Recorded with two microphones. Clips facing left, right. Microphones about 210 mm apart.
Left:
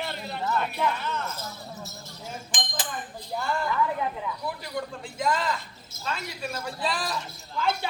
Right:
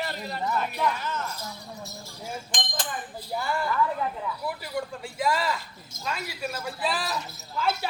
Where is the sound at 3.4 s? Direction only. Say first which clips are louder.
Even; 5° right (ahead or behind).